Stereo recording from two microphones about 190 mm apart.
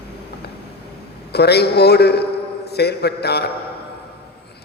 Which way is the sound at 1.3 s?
60° left (ahead or behind).